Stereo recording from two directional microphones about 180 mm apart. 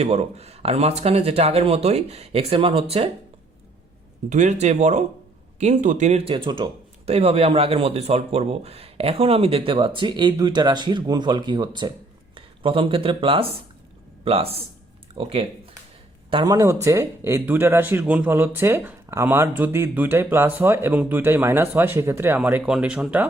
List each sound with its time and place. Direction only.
0.0 s speech: 35° right (ahead or behind)
4.3 s speech: 40° right (ahead or behind)
16.3 s speech: 20° right (ahead or behind); by 23.2 s 5° right (ahead or behind)